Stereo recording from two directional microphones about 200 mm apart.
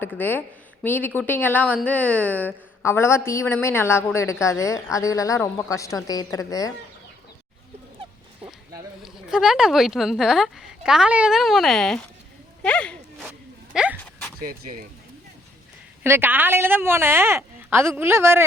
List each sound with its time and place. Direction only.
0.2 s a woman's voice: 10° left (ahead or behind)
9.0 s speech: 5° right (ahead or behind)
12.6 s a sound: 5° left (ahead or behind)
13.7 s speech: 5° right (ahead or behind)
14.4 s speech: 45° right (ahead or behind)
16.0 s a woman's voice: 10° right (ahead or behind)